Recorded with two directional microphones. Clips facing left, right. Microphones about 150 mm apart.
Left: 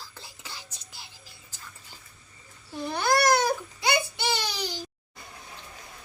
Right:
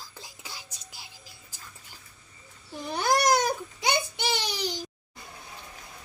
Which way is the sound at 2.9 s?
15° right (ahead or behind).